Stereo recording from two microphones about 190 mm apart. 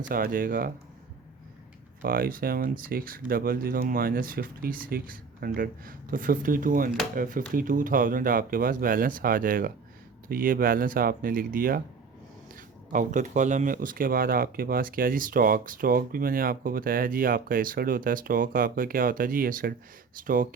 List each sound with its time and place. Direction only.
0.1 s speech: 45° right (ahead or behind)
2.0 s speech: 50° right (ahead or behind)